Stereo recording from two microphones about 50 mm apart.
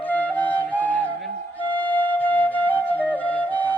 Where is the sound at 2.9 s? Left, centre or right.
Left.